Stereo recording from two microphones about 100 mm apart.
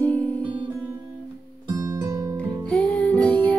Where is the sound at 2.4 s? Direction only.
15° left (ahead or behind).